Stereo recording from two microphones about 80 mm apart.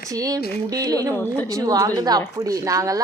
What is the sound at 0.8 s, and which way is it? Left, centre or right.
A child's voice, right.